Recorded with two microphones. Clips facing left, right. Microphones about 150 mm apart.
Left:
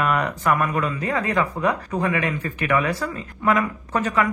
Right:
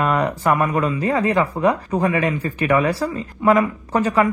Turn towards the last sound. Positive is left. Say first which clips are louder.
# right 4 dB
turn(degrees=-35)  # may be behind; listen again after turning